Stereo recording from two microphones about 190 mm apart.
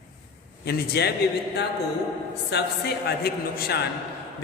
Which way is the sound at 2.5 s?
60° left (ahead or behind).